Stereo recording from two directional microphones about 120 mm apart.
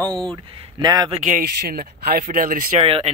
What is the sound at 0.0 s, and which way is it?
Speech, 10° left (ahead or behind).